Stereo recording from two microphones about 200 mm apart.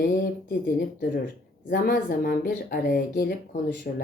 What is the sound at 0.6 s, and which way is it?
A woman's voice, 45° left (ahead or behind).